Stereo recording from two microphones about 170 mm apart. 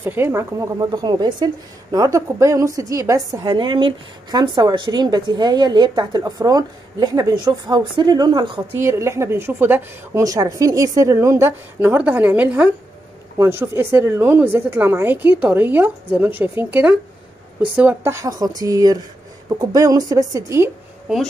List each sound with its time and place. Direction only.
0.0 s a woman's voice: 10° right (ahead or behind)
21.1 s speech: 5° right (ahead or behind)